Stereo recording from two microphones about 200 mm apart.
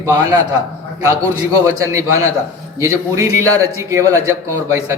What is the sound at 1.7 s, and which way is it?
A man's voice, 15° right (ahead or behind).